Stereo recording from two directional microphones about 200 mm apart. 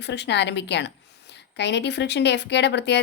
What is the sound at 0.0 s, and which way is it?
A woman's voice, 60° left (ahead or behind).